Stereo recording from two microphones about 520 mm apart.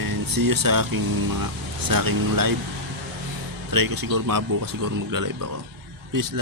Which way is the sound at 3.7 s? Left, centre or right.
Right.